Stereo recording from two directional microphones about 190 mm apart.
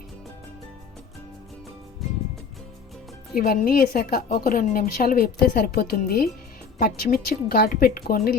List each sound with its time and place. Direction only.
3.3 s a woman's voice: 50° left (ahead or behind)